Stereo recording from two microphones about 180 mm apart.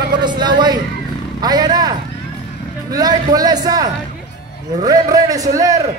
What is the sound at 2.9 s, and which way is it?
Speech, 20° right (ahead or behind).